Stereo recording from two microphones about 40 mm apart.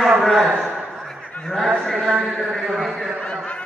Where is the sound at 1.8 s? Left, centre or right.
Centre.